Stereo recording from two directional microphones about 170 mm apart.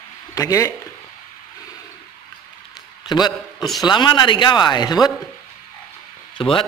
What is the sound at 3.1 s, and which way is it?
A man's voice, 25° left (ahead or behind).